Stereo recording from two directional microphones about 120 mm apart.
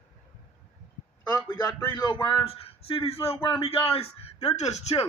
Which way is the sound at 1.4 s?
40° left (ahead or behind).